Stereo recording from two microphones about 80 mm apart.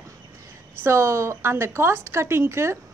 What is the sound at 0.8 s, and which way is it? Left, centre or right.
A woman's voice, right.